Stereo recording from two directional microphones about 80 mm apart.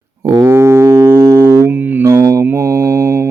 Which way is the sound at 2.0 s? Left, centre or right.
Right.